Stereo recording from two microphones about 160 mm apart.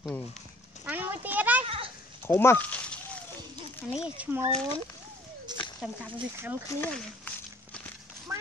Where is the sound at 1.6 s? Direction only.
35° right (ahead or behind).